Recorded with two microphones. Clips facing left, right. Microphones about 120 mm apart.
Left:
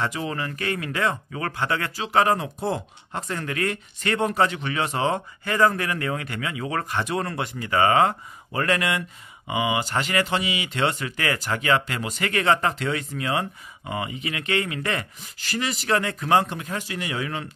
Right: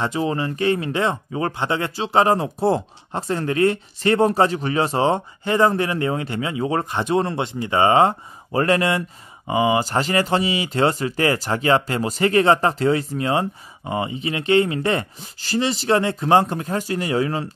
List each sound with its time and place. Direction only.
0.0 s speech: 30° right (ahead or behind)